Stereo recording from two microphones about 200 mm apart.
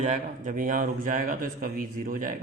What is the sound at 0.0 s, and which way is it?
A man's voice, 35° right (ahead or behind).